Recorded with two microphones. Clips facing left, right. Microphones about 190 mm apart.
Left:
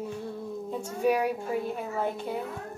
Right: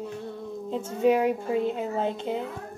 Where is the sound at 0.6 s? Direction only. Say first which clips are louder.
Right 4 dB; 20° right (ahead or behind).